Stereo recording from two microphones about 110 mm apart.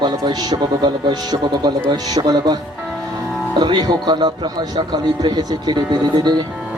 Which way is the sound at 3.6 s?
40° right (ahead or behind).